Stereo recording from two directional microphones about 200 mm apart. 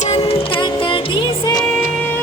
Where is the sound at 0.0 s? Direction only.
30° left (ahead or behind).